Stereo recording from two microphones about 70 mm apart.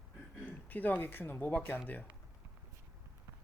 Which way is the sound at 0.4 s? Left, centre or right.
Left.